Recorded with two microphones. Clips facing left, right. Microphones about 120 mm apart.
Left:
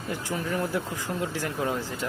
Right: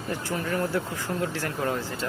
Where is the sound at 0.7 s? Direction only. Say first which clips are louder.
Right 1 dB; 15° left (ahead or behind).